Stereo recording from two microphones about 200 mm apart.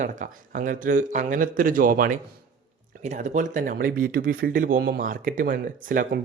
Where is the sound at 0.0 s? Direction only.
40° right (ahead or behind).